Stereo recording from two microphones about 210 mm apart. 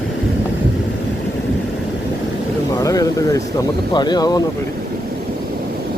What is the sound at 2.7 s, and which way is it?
Speech, 15° left (ahead or behind).